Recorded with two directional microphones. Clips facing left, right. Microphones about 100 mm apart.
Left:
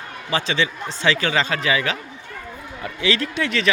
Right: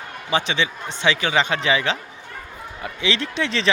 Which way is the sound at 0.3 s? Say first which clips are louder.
Even; 20° right (ahead or behind).